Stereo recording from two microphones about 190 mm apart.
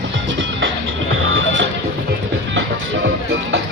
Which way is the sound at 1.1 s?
90° right.